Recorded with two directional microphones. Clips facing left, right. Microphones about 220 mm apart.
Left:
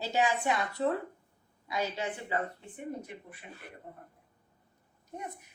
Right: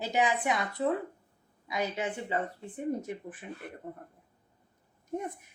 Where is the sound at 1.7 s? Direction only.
20° right (ahead or behind).